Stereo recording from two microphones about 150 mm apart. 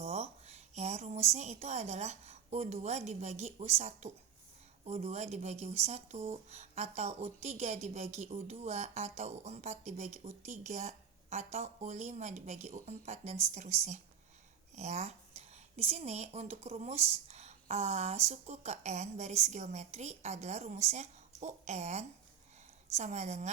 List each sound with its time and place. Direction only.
0.0 s speech: 45° right (ahead or behind)